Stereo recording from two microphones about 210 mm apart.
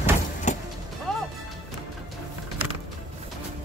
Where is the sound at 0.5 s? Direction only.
35° left (ahead or behind).